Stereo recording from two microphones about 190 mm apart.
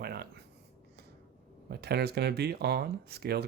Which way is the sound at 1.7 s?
60° right (ahead or behind).